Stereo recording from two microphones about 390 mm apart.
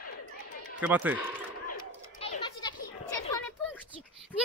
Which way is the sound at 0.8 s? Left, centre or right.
Centre.